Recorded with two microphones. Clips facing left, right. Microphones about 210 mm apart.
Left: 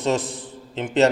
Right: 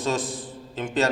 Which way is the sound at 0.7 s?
25° left (ahead or behind).